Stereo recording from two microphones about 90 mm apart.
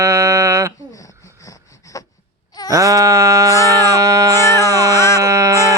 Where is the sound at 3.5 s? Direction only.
35° left (ahead or behind).